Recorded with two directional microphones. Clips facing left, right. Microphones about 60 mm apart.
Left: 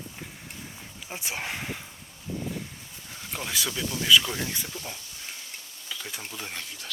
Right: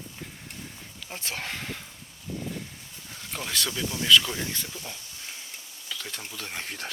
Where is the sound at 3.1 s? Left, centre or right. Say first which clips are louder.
Even; centre.